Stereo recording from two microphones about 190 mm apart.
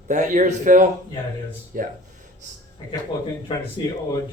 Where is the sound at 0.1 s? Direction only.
40° right (ahead or behind).